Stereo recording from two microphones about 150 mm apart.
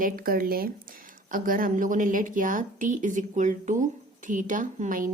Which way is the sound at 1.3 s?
65° right (ahead or behind).